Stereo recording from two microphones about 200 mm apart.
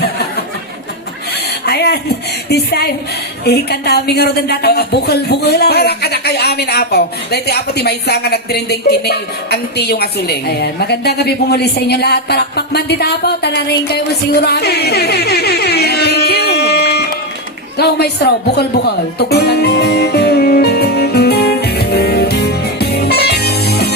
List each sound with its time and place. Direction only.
1.3 s a sound: 55° left (ahead or behind)
2.5 s a woman's voice: 55° left (ahead or behind)
17.7 s music: 55° left (ahead or behind)